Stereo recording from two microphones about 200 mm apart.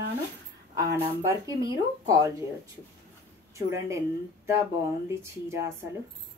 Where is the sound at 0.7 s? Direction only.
15° right (ahead or behind).